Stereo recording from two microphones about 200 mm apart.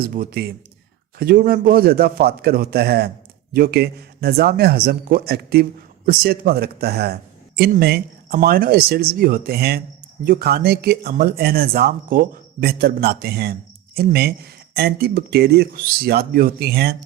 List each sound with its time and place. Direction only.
0.0 s speech: 45° right (ahead or behind)